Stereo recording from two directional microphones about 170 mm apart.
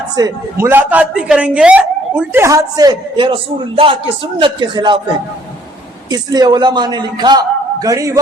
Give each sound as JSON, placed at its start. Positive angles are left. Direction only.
{"t": 0.2, "sound": "a man's voice", "side_deg": -20}
{"t": 6.1, "sound": "a man's voice", "side_deg": -25}